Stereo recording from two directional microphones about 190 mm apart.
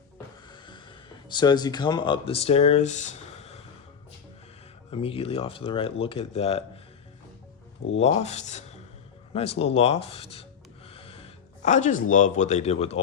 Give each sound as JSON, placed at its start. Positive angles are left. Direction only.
{"t": 0.4, "sound": "a sound", "side_deg": 25}
{"t": 4.9, "sound": "speech", "side_deg": 30}
{"t": 7.9, "sound": "speech", "side_deg": 35}